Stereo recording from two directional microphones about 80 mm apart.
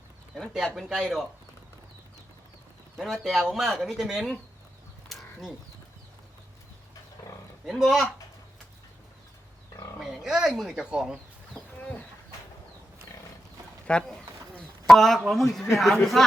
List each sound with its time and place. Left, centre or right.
0.5 s speech: centre
3.0 s speech: centre
5.0 s crow: centre
7.2 s roaring cats: left
7.6 s speech: centre
10.0 s a sound: centre
10.6 s speech: centre
11.8 s bird: left
13.8 s a sound: centre
14.8 s speech: centre